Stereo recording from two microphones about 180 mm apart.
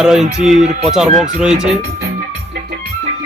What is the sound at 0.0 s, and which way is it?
Speech, 5° right (ahead or behind).